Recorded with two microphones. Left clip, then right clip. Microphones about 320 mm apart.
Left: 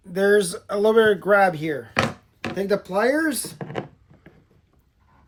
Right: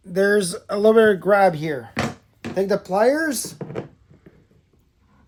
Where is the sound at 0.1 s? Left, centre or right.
Right.